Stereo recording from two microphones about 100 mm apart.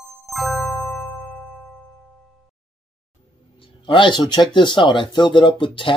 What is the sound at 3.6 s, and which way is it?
Speech, 55° left (ahead or behind).